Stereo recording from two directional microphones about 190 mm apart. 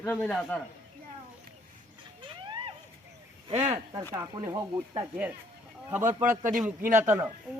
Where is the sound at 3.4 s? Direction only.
35° right (ahead or behind).